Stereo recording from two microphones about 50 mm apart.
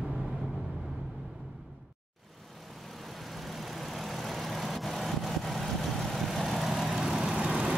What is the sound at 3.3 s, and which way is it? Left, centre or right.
Vehicle, centre.